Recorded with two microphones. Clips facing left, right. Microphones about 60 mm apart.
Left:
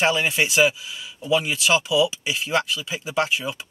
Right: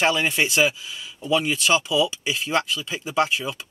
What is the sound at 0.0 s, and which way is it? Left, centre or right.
Speech, centre.